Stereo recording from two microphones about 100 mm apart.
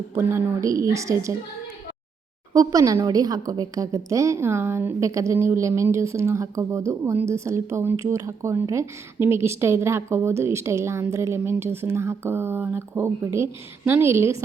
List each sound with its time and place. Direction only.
0.2 s a woman's voice: 25° right (ahead or behind)
2.5 s a woman's voice: 35° right (ahead or behind)